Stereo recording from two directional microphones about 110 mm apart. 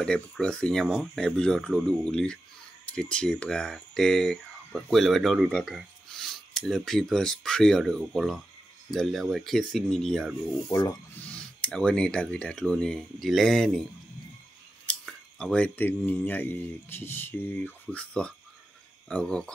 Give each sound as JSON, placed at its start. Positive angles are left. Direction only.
{"t": 0.0, "sound": "speech", "side_deg": 10}
{"t": 14.9, "sound": "a sound", "side_deg": 5}
{"t": 16.1, "sound": "speech", "side_deg": 15}